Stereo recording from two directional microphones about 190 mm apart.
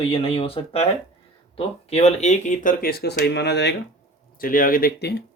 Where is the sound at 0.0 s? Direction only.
30° left (ahead or behind); by 3.8 s 60° left (ahead or behind).